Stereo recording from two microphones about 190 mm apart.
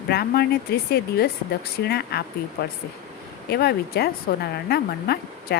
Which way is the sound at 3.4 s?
55° left (ahead or behind).